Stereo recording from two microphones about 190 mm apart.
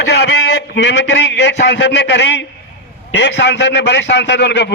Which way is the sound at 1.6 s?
60° left (ahead or behind).